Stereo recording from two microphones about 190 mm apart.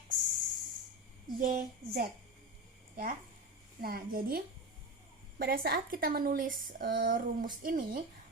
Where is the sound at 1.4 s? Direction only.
45° right (ahead or behind).